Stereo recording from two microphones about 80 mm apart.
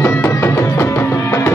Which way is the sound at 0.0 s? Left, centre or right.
Left.